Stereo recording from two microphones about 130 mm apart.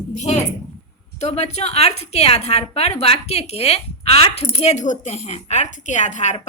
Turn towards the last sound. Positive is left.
turn(degrees=70)  # may be behind; listen again after turning